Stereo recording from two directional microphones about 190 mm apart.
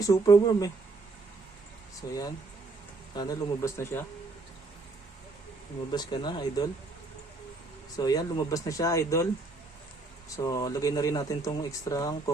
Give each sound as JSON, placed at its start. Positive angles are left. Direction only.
{"t": 0.0, "sound": "speech", "side_deg": 20}
{"t": 2.0, "sound": "speech", "side_deg": 20}
{"t": 5.9, "sound": "speech", "side_deg": 20}
{"t": 7.9, "sound": "speech", "side_deg": 20}
{"t": 10.2, "sound": "speech", "side_deg": 15}